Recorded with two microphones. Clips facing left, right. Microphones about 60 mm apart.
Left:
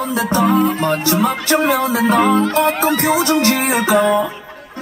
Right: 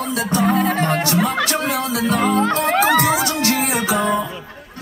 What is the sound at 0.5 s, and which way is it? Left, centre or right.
Music, right.